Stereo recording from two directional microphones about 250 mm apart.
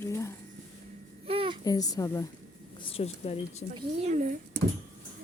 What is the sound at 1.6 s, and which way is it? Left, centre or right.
A woman's voice, centre.